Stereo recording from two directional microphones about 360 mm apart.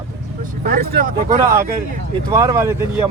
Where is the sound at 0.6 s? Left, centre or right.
Right.